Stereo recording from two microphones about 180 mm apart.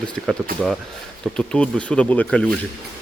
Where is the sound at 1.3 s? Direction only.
5° left (ahead or behind).